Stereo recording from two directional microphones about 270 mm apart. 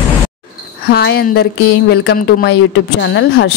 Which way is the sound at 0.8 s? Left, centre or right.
Left.